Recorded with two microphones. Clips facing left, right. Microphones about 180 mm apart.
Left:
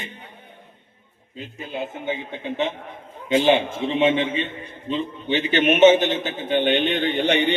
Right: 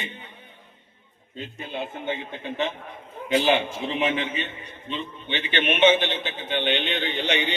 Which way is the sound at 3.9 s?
25° left (ahead or behind).